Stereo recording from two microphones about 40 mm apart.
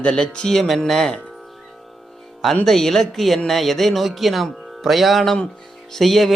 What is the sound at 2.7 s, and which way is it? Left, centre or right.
Speech, centre.